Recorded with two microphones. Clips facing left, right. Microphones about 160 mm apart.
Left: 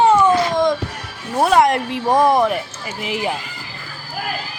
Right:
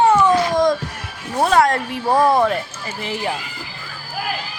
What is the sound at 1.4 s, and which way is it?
Speech, 15° left (ahead or behind).